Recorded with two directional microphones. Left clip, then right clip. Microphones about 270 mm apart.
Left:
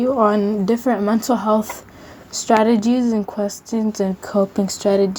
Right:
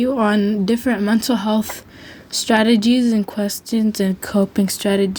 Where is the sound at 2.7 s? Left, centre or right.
Right.